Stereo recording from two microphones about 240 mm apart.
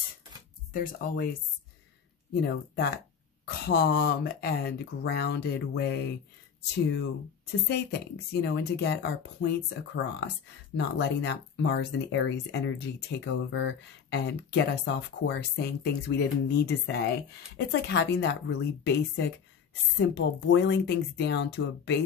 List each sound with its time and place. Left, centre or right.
0.7 s speech: left
2.4 s speech: left
10.8 s speech: left